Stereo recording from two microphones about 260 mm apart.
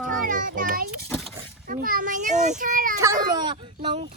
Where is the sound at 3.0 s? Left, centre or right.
Centre.